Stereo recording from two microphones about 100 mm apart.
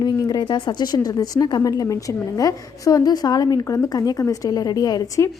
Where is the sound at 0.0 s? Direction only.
45° left (ahead or behind).